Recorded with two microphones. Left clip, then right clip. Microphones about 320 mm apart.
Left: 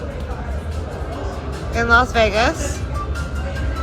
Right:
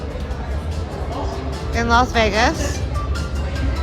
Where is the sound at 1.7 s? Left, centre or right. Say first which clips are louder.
Left 2 dB; centre.